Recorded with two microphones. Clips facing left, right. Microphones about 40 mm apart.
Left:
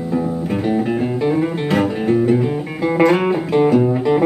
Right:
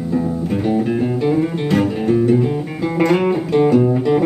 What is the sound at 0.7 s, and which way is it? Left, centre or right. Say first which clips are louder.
Music: right 1 dB; centre.